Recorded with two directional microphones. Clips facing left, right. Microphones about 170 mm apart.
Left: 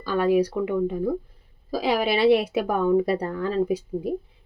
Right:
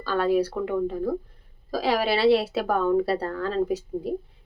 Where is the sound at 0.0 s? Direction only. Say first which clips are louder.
Left 2 dB; 15° left (ahead or behind).